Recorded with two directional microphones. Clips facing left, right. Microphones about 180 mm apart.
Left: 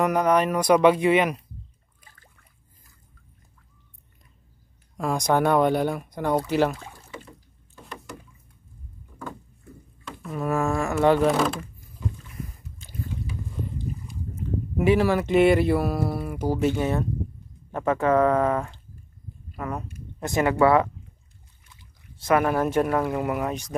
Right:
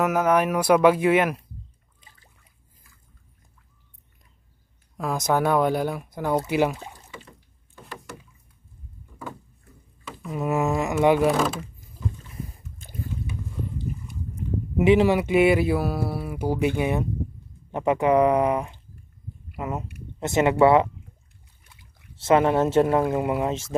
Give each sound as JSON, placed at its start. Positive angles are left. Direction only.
{"t": 0.0, "sound": "speech", "side_deg": -5}
{"t": 4.9, "sound": "speech", "side_deg": 0}
{"t": 7.7, "sound": "vehicle", "side_deg": 0}
{"t": 10.3, "sound": "speech", "side_deg": -20}
{"t": 11.2, "sound": "speech", "side_deg": 0}
{"t": 14.8, "sound": "speech", "side_deg": -20}
{"t": 22.2, "sound": "speech", "side_deg": -25}